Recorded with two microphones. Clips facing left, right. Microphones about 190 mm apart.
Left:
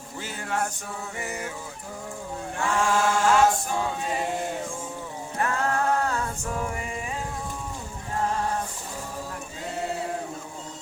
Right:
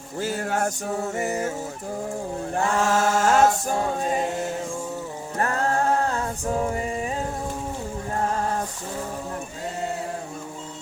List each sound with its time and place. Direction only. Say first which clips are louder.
0.2 s music: right 5 dB; 45° right (ahead or behind)
2.6 s chant: right 2 dB; 40° right (ahead or behind)
5.4 s a sound: right 2 dB; 40° right (ahead or behind)